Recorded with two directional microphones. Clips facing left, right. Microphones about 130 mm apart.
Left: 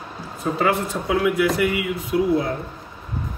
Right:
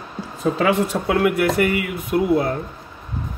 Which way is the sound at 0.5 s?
90° right.